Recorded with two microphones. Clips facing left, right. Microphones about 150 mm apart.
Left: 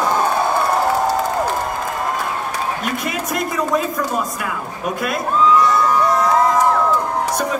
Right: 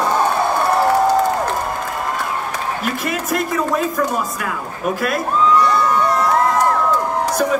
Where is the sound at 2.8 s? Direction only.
Centre (ahead or behind).